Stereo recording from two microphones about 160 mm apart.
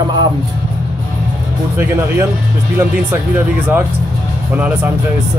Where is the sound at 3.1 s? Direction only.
10° right (ahead or behind).